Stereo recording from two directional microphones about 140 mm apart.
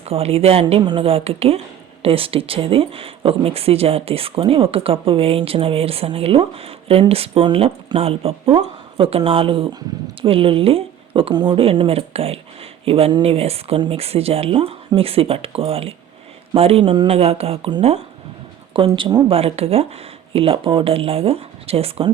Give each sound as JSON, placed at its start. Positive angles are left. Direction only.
{"t": 0.0, "sound": "speech", "side_deg": -45}
{"t": 0.6, "sound": "speech", "side_deg": -35}